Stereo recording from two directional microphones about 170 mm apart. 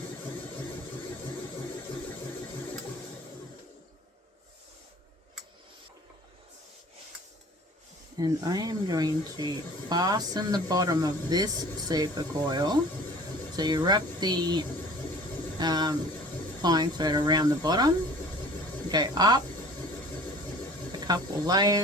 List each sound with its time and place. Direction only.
8.2 s speech: 25° right (ahead or behind)
21.1 s speech: 25° right (ahead or behind)